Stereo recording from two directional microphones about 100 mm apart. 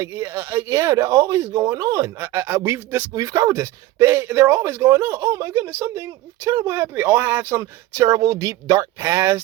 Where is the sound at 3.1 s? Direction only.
35° right (ahead or behind).